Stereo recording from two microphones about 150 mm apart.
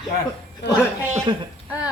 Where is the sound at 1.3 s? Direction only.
30° right (ahead or behind).